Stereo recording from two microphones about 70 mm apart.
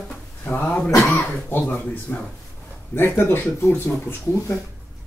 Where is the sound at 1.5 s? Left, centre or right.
Left.